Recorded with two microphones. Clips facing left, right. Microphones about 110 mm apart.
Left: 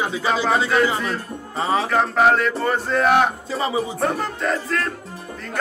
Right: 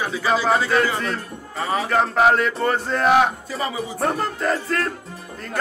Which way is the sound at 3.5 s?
25° left (ahead or behind).